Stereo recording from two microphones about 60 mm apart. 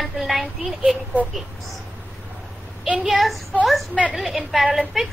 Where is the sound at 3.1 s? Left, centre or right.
Centre.